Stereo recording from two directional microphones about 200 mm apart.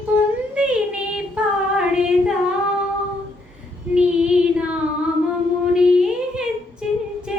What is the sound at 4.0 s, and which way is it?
Child singing, 5° right (ahead or behind).